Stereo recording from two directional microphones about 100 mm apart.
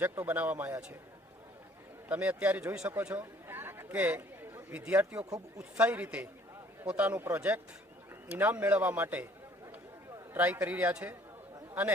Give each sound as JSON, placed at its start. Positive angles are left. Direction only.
{"t": 0.0, "sound": "speech", "side_deg": -20}
{"t": 2.0, "sound": "a man's voice", "side_deg": -15}
{"t": 3.0, "sound": "chatter", "side_deg": -15}
{"t": 4.8, "sound": "a man's voice", "side_deg": -15}
{"t": 10.3, "sound": "a man's voice", "side_deg": -15}